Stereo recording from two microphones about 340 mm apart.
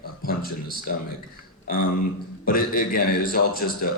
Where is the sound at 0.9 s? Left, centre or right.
Left.